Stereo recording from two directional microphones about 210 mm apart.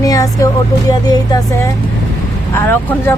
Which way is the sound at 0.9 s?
15° left (ahead or behind).